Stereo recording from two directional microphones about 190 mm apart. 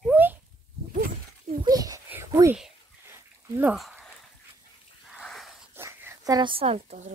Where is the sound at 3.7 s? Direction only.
Centre (ahead or behind).